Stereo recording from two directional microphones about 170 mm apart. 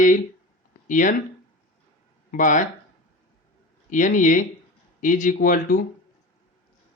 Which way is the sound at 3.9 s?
50° left (ahead or behind).